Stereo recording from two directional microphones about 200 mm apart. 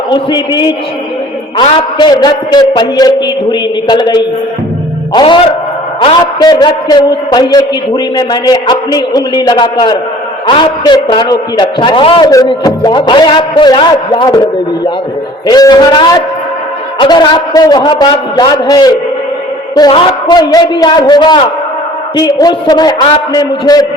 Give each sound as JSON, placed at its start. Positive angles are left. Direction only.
{"t": 0.1, "sound": "a man's voice", "side_deg": 20}
{"t": 15.4, "sound": "a man's voice", "side_deg": 20}